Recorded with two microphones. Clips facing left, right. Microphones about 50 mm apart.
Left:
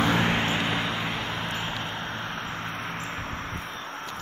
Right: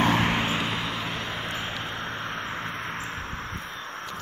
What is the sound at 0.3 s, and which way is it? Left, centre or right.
Vehicle, centre.